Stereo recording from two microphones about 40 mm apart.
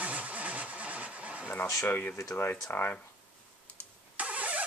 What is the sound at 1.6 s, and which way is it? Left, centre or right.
Speech, left.